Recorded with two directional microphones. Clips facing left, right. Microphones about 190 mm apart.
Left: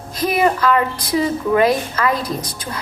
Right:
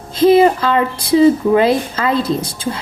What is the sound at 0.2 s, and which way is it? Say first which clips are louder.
A woman's voice: right 7 dB; 25° right (ahead or behind).